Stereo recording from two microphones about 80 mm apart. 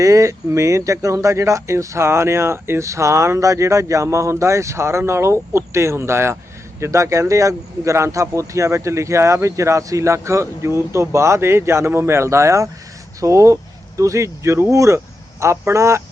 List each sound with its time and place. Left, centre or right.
0.0 s speech: right